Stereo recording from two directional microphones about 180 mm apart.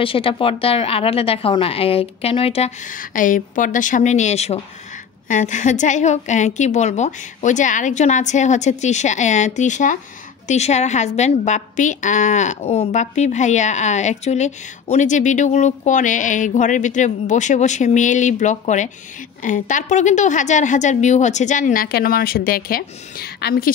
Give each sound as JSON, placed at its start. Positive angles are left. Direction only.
{"t": 0.0, "sound": "a woman's voice", "side_deg": 30}